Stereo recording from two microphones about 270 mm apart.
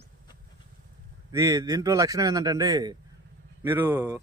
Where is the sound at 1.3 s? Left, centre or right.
Centre.